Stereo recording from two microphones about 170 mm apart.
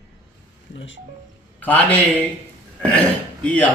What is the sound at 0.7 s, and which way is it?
Speech, 90° left.